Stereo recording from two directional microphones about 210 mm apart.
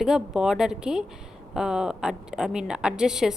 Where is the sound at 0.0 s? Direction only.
Centre (ahead or behind).